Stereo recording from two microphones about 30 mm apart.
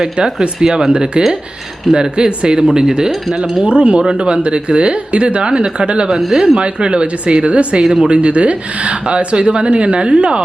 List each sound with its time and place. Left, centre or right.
0.0 s speech: centre
0.9 s speech: right
3.6 s speech: right
6.1 s speech: centre
6.6 s speech: right